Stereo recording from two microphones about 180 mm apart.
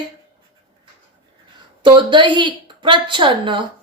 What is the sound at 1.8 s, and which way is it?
Speech, 25° right (ahead or behind).